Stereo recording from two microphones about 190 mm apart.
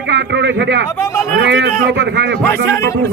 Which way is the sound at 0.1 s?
65° right (ahead or behind).